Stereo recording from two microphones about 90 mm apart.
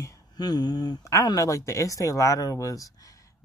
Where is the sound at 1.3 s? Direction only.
35° left (ahead or behind).